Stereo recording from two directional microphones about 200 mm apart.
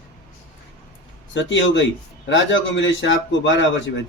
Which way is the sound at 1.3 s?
65° left (ahead or behind).